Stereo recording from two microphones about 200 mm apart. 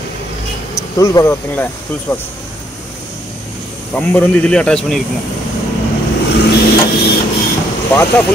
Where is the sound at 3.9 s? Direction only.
10° left (ahead or behind).